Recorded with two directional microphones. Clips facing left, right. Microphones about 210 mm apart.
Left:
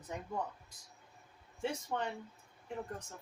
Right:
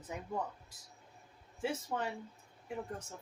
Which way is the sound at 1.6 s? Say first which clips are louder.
Even; 5° right (ahead or behind).